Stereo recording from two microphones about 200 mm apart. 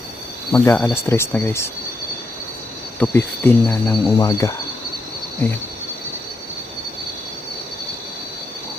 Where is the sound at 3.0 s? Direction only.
10° left (ahead or behind).